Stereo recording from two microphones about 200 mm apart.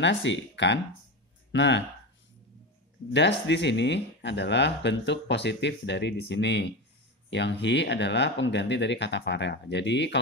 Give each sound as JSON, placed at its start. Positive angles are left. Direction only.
{"t": 0.0, "sound": "speech", "side_deg": 65}
{"t": 3.1, "sound": "speech", "side_deg": 60}